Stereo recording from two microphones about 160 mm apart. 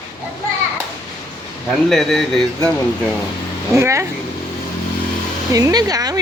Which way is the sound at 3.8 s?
20° right (ahead or behind).